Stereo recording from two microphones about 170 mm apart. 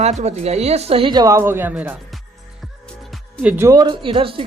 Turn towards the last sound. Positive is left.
turn(degrees=-30)  # may be behind; listen again after turning